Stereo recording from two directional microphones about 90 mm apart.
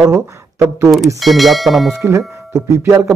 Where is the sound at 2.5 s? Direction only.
30° right (ahead or behind).